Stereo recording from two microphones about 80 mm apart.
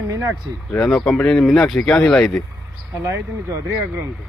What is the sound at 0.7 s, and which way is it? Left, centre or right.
Speech, centre.